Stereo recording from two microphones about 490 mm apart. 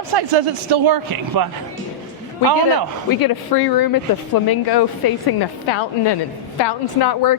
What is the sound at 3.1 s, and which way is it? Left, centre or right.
A woman's voice, left.